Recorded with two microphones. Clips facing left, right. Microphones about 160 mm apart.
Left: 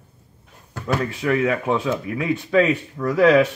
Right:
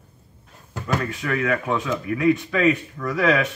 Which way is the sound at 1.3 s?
25° left (ahead or behind).